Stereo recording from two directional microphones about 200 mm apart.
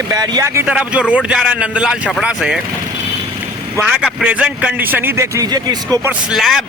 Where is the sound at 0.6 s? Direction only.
5° right (ahead or behind).